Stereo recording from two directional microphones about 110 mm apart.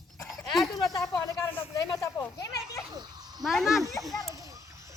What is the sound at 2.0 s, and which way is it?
Children playing, 30° left (ahead or behind).